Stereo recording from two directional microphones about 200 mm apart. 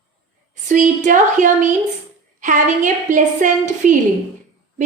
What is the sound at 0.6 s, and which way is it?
A woman's voice, 40° right (ahead or behind).